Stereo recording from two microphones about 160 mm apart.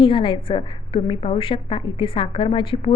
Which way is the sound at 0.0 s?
30° left (ahead or behind).